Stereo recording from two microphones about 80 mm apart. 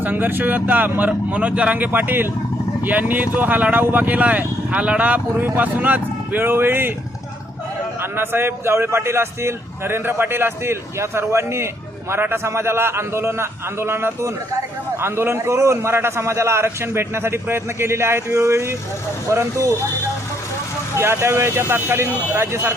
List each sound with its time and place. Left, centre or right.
0.0 s speech: right
8.1 s a man's voice: right
21.0 s a man's voice: right